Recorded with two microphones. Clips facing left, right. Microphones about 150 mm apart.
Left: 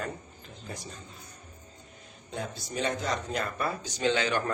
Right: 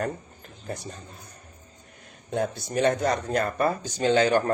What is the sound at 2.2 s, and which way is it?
Speech, 60° right (ahead or behind).